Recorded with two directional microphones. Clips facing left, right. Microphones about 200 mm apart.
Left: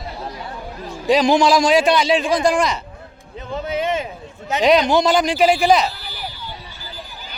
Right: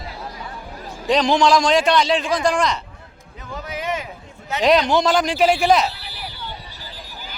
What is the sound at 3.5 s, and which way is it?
Speech, 25° left (ahead or behind).